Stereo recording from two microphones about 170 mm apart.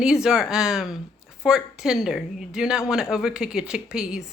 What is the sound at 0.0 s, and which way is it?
A woman's voice, 5° right (ahead or behind).